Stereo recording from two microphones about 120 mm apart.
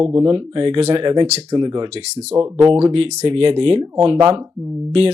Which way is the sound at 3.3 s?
45° right (ahead or behind).